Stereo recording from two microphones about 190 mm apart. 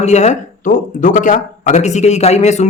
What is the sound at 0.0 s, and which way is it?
A man's voice, 35° left (ahead or behind).